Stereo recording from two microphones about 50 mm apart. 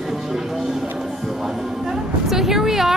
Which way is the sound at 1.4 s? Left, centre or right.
Centre.